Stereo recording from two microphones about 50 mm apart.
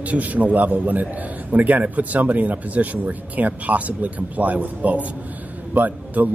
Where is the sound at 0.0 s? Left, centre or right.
Right.